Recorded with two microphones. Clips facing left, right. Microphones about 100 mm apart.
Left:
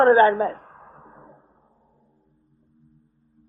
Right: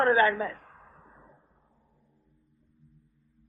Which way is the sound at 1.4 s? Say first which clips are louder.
Left 7 dB; 35° left (ahead or behind).